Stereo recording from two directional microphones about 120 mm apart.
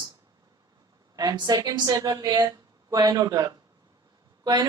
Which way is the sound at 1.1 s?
35° right (ahead or behind).